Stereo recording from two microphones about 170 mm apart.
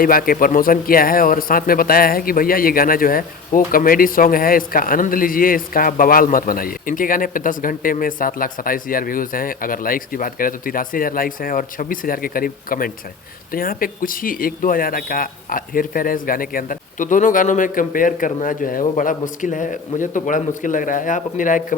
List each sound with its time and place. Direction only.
0.0 s speech: 60° left (ahead or behind)